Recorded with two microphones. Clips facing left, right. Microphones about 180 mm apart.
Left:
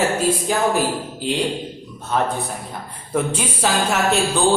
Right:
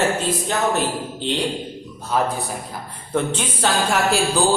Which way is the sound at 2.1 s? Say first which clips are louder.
Even; centre (ahead or behind).